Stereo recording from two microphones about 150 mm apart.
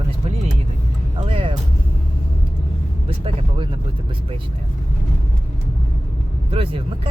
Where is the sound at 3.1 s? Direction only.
40° right (ahead or behind).